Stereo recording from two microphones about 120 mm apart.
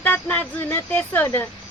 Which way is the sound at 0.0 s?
15° left (ahead or behind).